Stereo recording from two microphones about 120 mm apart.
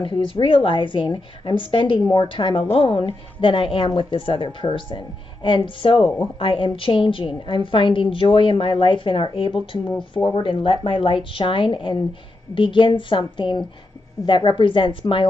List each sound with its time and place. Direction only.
0.0 s a woman's voice: 45° left (ahead or behind)